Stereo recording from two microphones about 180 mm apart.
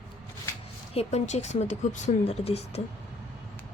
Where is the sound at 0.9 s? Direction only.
40° left (ahead or behind).